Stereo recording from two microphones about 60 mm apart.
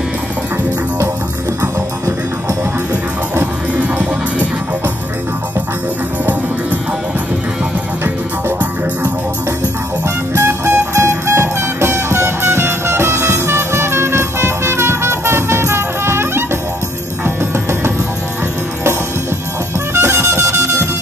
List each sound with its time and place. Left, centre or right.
3.7 s music: right
10.3 s music: right
19.9 s music: right